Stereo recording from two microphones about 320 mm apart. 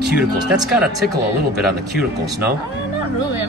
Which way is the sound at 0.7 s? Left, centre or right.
Centre.